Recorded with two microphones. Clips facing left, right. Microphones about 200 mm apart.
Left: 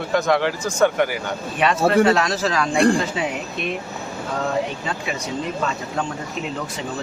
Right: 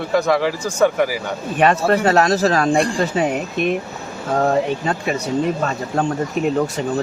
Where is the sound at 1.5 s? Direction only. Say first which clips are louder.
Right 1 dB; 45° right (ahead or behind).